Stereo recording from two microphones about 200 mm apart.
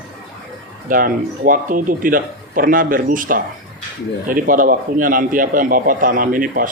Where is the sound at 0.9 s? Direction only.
45° right (ahead or behind).